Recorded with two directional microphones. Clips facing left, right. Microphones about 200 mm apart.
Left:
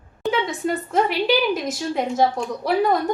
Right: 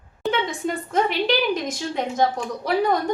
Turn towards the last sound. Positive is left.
turn(degrees=0)  # may be behind; listen again after turning